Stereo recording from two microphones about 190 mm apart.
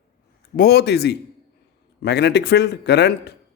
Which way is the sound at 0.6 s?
55° left (ahead or behind).